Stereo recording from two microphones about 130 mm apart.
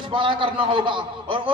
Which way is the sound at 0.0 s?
40° right (ahead or behind).